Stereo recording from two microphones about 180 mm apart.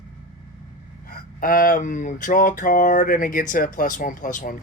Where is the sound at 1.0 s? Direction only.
55° left (ahead or behind).